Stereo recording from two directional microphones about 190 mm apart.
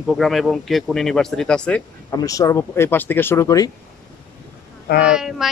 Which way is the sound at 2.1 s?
20° left (ahead or behind).